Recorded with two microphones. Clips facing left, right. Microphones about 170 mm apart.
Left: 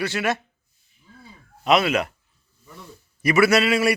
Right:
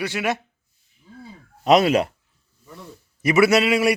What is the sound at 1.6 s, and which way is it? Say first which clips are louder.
Speech: right 4 dB; 40° right (ahead or behind).